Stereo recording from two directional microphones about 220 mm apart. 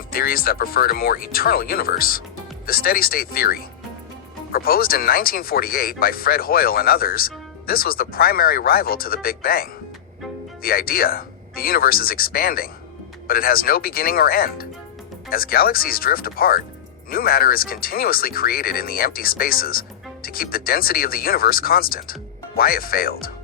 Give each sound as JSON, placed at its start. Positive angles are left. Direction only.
{"t": 0.1, "sound": "speech", "side_deg": 40}